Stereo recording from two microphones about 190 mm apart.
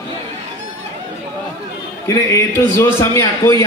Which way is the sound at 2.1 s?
15° left (ahead or behind).